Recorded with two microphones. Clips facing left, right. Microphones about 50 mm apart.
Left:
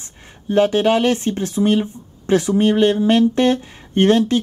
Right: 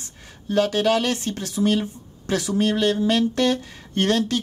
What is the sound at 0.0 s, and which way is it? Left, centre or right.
Speech, left.